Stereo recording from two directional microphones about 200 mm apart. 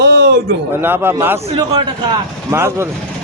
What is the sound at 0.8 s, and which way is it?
Speech, 10° right (ahead or behind).